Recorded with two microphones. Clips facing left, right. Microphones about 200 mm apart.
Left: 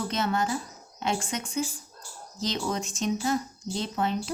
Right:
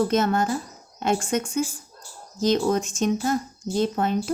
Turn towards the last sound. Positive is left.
turn(degrees=-50)  # may be behind; listen again after turning